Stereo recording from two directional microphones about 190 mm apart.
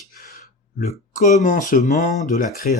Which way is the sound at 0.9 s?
40° left (ahead or behind).